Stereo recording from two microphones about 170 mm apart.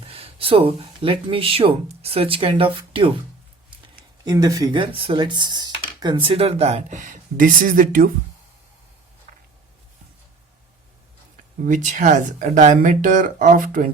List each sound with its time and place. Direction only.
0.1 s speech: 35° right (ahead or behind)
4.3 s speech: 20° right (ahead or behind); by 8.1 s 50° right (ahead or behind)
11.6 s speech: 50° right (ahead or behind)